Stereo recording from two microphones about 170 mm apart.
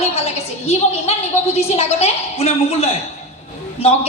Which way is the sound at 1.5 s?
40° left (ahead or behind).